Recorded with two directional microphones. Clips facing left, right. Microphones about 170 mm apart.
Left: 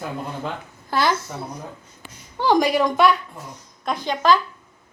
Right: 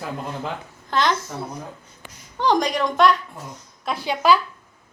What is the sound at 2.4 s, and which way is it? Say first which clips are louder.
Speech: left 2 dB; 5° left (ahead or behind).